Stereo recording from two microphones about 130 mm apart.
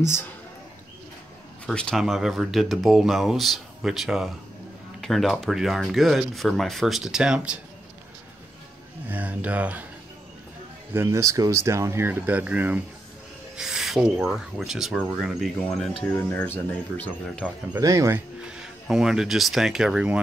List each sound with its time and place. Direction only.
0.0 s speech: 20° left (ahead or behind)
1.7 s speech: 5° left (ahead or behind)
9.0 s speech: 15° right (ahead or behind)
10.9 s speech: 20° right (ahead or behind); by 15.9 s centre (ahead or behind)
16.2 s speech: 15° left (ahead or behind)
17.7 s speech: 25° right (ahead or behind)
18.4 s speech: 5° right (ahead or behind)